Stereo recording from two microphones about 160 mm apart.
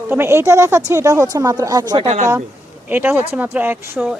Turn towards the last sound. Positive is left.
turn(degrees=-10)  # may be behind; listen again after turning